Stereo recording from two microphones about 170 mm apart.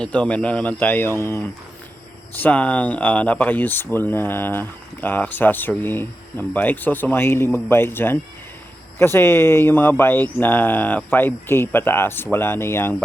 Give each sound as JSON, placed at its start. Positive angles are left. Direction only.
{"t": 0.0, "sound": "speech", "side_deg": 5}